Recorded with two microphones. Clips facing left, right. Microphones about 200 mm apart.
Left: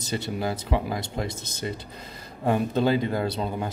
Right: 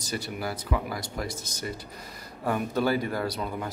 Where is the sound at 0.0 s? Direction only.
25° left (ahead or behind).